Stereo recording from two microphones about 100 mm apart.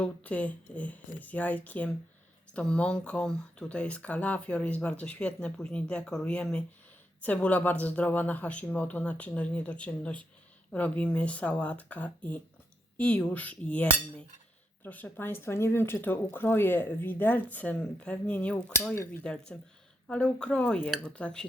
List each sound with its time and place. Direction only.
0.0 s speech: 15° left (ahead or behind)